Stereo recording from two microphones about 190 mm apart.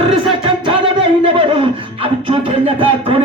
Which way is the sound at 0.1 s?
30° right (ahead or behind).